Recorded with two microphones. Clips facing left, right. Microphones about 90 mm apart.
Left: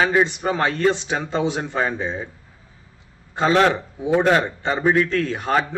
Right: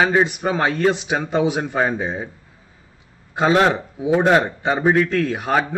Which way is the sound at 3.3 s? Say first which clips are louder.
Right 1 dB; 10° right (ahead or behind).